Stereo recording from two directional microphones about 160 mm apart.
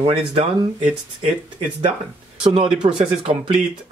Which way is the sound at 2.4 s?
35° right (ahead or behind).